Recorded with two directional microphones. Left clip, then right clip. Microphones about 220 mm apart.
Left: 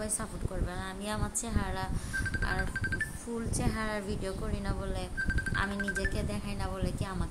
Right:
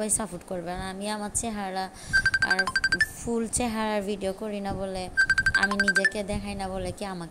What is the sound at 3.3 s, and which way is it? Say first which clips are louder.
A woman's voice: right 6 dB; 25° right (ahead or behind).